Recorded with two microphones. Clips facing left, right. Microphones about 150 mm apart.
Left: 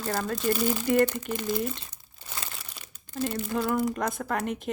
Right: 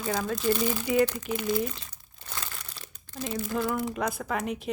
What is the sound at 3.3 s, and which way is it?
Speech, centre (ahead or behind).